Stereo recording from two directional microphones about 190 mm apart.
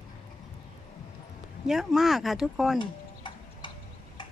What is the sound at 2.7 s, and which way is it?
Tick-tock, 25° left (ahead or behind).